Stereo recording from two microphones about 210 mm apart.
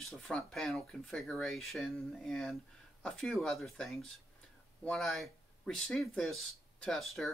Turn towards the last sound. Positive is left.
turn(degrees=0)  # may be behind; listen again after turning